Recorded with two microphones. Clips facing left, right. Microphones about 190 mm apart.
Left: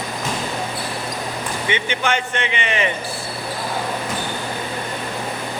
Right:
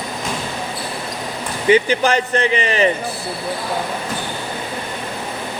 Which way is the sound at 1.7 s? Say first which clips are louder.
Right 9 dB; 35° right (ahead or behind).